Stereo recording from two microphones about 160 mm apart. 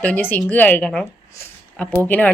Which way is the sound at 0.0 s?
10° left (ahead or behind).